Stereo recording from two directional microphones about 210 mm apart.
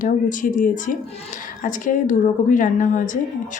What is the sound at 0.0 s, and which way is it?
Speech, 40° left (ahead or behind).